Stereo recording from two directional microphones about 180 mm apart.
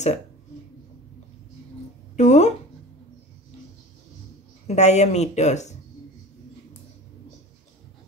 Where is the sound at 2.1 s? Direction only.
40° left (ahead or behind).